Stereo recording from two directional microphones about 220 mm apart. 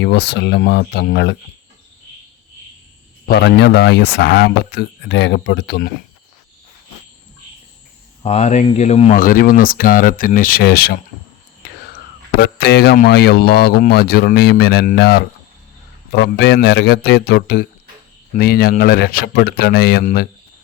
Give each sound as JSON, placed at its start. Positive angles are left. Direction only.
{"t": 0.0, "sound": "speech", "side_deg": 50}
{"t": 3.2, "sound": "speech", "side_deg": 45}
{"t": 8.2, "sound": "speech", "side_deg": 30}
{"t": 12.4, "sound": "speech", "side_deg": 45}